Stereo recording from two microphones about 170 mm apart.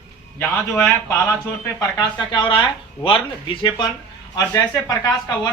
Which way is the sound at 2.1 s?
25° left (ahead or behind).